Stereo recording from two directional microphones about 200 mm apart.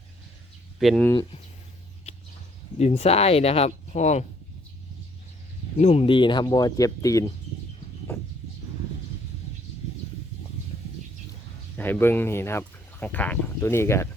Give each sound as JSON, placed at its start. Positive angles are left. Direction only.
{"t": 0.8, "sound": "speech", "side_deg": 0}
{"t": 1.1, "sound": "speech", "side_deg": 20}
{"t": 2.7, "sound": "speech", "side_deg": 30}
{"t": 5.7, "sound": "speech", "side_deg": 35}
{"t": 11.8, "sound": "speech", "side_deg": 10}